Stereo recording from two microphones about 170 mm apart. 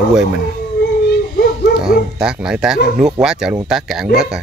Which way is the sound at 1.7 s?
5° right (ahead or behind).